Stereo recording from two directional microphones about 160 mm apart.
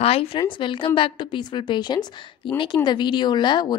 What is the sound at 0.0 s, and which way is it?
A woman's voice, 40° left (ahead or behind).